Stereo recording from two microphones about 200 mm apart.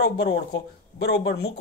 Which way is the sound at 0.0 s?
55° left (ahead or behind).